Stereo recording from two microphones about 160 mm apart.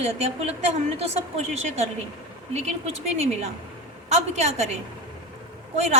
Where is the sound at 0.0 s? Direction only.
40° right (ahead or behind).